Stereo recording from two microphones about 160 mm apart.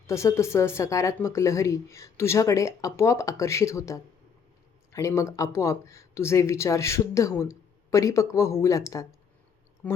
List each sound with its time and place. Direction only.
0.1 s speech: 20° left (ahead or behind)